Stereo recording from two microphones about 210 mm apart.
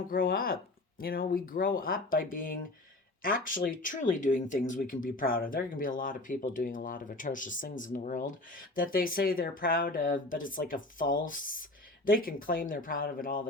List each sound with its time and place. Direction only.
0.1 s speech: 45° left (ahead or behind)